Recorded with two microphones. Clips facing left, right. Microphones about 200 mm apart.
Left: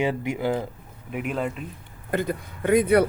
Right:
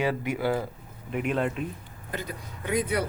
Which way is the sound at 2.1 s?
55° left (ahead or behind).